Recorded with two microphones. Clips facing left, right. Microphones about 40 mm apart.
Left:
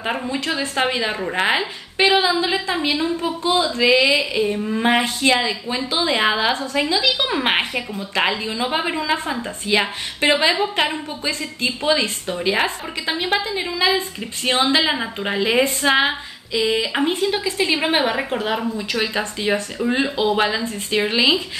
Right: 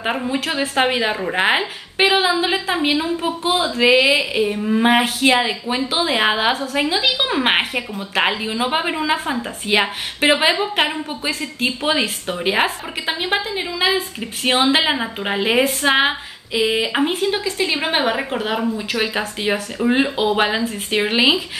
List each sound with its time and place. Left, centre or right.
0.3 s speech: centre
4.2 s speech: centre
9.7 s speech: right
10.5 s speech: centre
11.6 s speech: right
13.1 s speech: centre
14.4 s speech: right
15.0 s speech: centre
15.3 s speech: centre
15.8 s female singing: centre
16.9 s a woman's voice: centre